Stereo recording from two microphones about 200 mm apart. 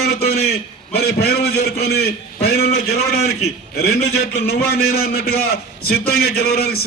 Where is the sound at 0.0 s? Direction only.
55° left (ahead or behind).